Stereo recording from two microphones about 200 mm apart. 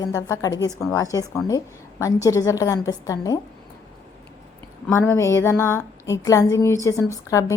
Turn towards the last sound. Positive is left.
turn(degrees=15)  # may be behind; listen again after turning